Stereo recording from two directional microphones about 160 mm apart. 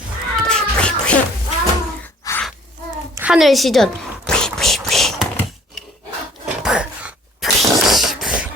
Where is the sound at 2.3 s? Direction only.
20° left (ahead or behind).